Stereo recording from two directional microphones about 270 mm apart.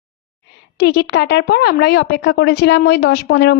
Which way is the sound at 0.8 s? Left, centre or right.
Left.